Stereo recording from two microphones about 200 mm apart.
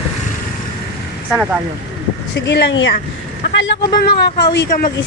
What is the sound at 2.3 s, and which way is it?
Speech, 60° left (ahead or behind).